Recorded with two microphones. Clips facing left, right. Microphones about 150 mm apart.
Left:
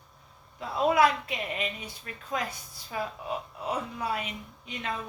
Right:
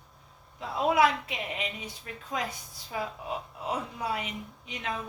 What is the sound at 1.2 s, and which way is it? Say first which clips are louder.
A woman's voice: left 2 dB; 15° right (ahead or behind).